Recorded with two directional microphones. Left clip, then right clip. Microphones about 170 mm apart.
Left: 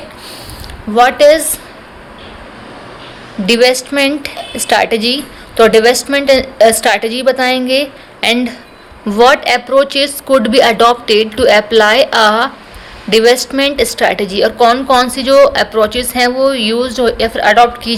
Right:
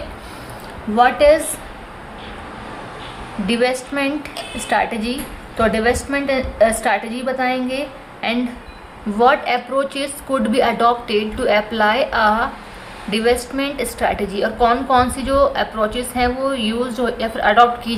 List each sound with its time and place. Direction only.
0.9 s a woman's voice: 50° left (ahead or behind)
3.4 s a woman's voice: 40° left (ahead or behind)